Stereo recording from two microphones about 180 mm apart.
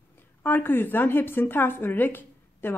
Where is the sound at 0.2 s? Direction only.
10° left (ahead or behind).